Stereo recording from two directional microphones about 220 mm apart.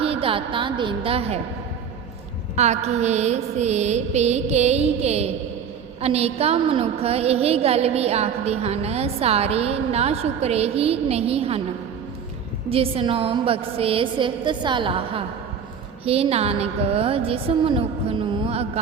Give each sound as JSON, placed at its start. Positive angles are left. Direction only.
{"t": 0.0, "sound": "a woman's voice", "side_deg": -25}
{"t": 2.6, "sound": "mantra", "side_deg": -30}
{"t": 6.0, "sound": "a woman's voice", "side_deg": -30}
{"t": 12.7, "sound": "a woman's voice", "side_deg": -25}